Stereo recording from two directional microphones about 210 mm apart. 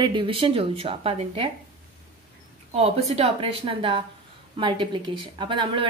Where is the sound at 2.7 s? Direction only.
30° right (ahead or behind).